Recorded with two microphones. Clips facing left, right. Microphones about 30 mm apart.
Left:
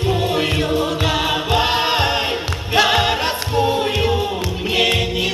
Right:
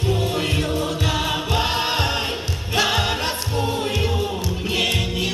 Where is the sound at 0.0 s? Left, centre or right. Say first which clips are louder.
Left 4 dB; left.